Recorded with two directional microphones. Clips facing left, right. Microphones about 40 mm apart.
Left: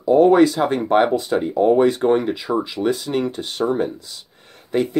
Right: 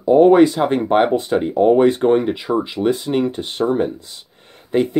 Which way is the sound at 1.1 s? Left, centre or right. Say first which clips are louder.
Right 2 dB; right.